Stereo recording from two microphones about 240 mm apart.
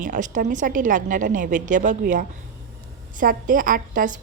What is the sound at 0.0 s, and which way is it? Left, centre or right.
A woman's voice, right.